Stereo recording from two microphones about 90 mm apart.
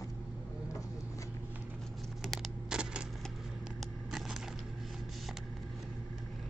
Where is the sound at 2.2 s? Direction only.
Centre (ahead or behind).